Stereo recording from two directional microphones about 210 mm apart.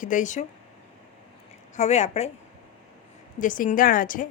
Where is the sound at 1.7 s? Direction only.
35° left (ahead or behind).